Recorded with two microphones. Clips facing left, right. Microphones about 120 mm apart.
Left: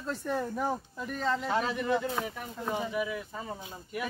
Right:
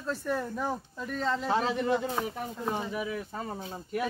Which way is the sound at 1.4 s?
30° right (ahead or behind).